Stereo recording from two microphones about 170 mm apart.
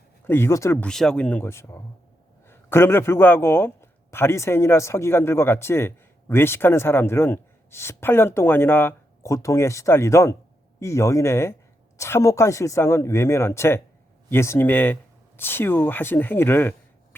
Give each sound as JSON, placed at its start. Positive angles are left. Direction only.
{"t": 0.3, "sound": "a man's voice", "side_deg": 15}